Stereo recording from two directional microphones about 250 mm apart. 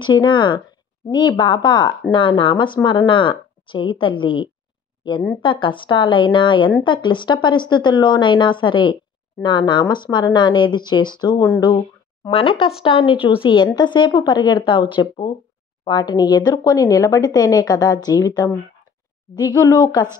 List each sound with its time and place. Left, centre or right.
0.0 s speech: centre